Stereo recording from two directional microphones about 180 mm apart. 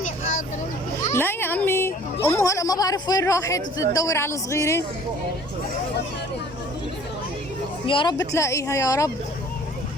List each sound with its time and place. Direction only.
1.1 s a sound: 10° left (ahead or behind)
2.2 s speech: 15° left (ahead or behind)
7.9 s speech: 30° left (ahead or behind)
8.3 s speech: 15° left (ahead or behind)